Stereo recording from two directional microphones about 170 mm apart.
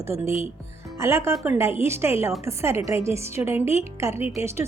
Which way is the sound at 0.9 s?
15° right (ahead or behind).